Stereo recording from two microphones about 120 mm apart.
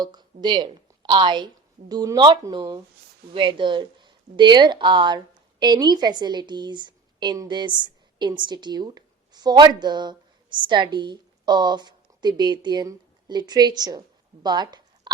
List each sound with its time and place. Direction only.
0.0 s a woman's voice: 35° right (ahead or behind)
3.3 s speech: 45° right (ahead or behind)
14.4 s a sound: 35° right (ahead or behind)